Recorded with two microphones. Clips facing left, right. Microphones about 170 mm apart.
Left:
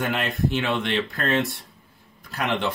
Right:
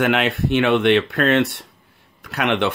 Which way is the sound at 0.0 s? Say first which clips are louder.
Right 6 dB; 75° right (ahead or behind).